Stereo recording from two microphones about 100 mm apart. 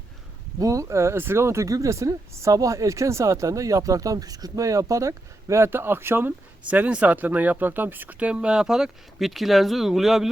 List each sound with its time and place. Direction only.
0.6 s speech: 35° right (ahead or behind); by 10.2 s centre (ahead or behind)